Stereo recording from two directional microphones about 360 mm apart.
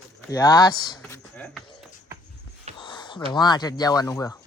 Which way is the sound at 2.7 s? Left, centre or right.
Centre.